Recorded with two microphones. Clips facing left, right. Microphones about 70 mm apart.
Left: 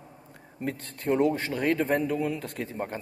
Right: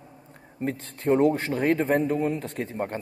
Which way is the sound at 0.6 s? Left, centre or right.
Right.